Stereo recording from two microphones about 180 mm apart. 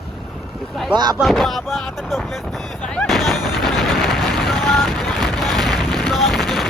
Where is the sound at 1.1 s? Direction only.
Centre (ahead or behind).